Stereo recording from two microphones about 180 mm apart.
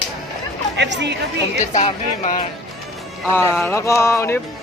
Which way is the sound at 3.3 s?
15° left (ahead or behind).